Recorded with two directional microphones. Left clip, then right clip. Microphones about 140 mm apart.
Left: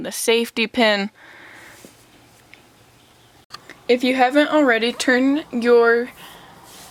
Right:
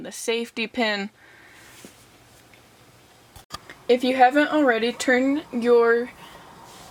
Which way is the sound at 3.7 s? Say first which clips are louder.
Left 2 dB; 30° left (ahead or behind).